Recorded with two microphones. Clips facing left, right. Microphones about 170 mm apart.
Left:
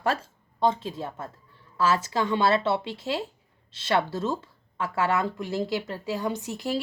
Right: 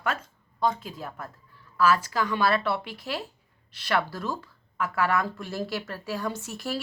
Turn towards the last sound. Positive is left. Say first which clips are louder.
# left 3 dB
turn(degrees=20)  # may be behind; listen again after turning